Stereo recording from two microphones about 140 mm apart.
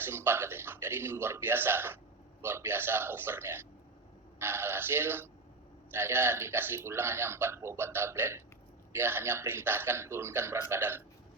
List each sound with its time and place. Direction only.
0.0 s a man's voice: 15° right (ahead or behind)